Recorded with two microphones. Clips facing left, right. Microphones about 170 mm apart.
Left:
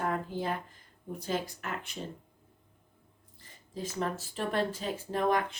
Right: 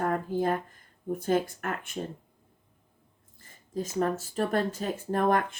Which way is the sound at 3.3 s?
45° right (ahead or behind).